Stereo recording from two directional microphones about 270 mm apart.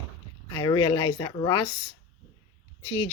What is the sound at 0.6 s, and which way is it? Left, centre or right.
Speech, centre.